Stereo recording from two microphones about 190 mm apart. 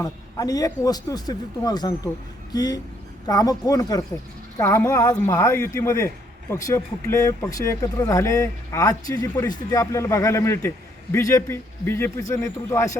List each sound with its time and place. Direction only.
0.0 s a man's voice: 20° left (ahead or behind)